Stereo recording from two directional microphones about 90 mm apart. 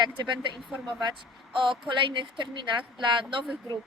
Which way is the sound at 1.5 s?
65° right (ahead or behind).